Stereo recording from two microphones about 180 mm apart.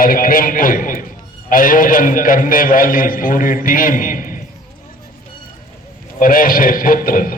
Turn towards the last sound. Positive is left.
turn(degrees=50)  # may be behind; listen again after turning